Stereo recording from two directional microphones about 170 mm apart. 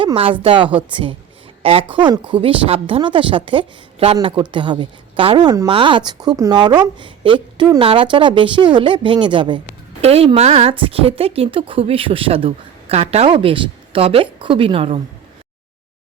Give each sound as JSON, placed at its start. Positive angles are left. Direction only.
{"t": 0.0, "sound": "a woman's voice", "side_deg": -30}